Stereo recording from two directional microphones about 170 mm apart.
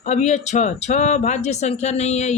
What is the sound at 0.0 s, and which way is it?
Speech, 45° left (ahead or behind).